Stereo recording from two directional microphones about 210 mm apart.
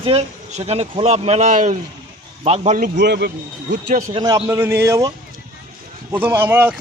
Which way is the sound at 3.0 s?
50° right (ahead or behind).